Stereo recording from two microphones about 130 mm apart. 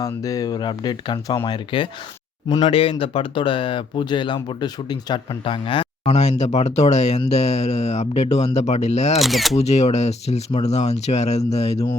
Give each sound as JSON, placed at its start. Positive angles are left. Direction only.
{"t": 0.0, "sound": "speech", "side_deg": 25}
{"t": 6.1, "sound": "speech", "side_deg": 60}
{"t": 9.2, "sound": "speech", "side_deg": 0}
{"t": 9.6, "sound": "speech", "side_deg": 55}